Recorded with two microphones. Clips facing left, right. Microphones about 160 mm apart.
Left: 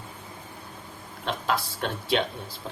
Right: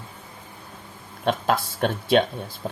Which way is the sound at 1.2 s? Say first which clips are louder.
Right 5 dB; 50° right (ahead or behind).